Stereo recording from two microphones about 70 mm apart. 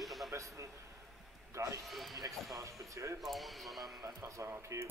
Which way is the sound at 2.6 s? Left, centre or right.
Right.